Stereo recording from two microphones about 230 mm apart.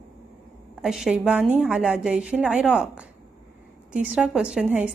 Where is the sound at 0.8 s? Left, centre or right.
Centre.